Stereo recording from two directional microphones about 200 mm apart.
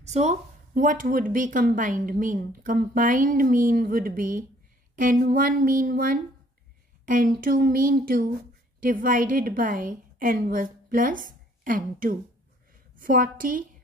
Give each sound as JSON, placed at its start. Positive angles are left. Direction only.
{"t": 0.0, "sound": "speech", "side_deg": -35}